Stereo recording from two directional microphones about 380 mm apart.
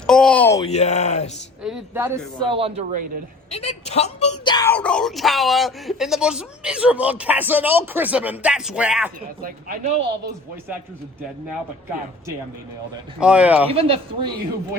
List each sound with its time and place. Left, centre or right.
0.1 s speech: centre
0.7 s speech: centre
1.6 s speech: centre
3.5 s speech: centre
9.4 s speech: right
13.1 s speech: centre
13.7 s speech: centre